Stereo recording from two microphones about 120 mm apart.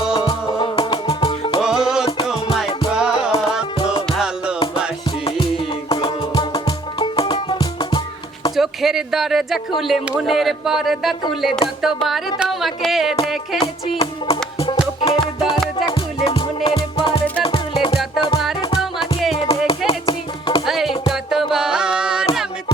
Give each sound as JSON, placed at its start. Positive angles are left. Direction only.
{"t": 0.1, "sound": "music", "side_deg": 40}
{"t": 1.6, "sound": "music", "side_deg": -5}
{"t": 5.9, "sound": "music", "side_deg": 45}
{"t": 8.5, "sound": "speech", "side_deg": 0}
{"t": 13.6, "sound": "music", "side_deg": 55}
{"t": 19.3, "sound": "music", "side_deg": 55}
{"t": 20.7, "sound": "music", "side_deg": 0}
{"t": 21.5, "sound": "carnatic music", "side_deg": -5}